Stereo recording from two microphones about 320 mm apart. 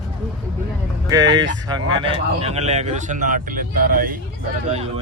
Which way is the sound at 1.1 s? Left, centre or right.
Centre.